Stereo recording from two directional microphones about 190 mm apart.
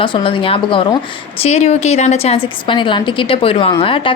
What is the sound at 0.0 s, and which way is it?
A woman's voice, 30° left (ahead or behind).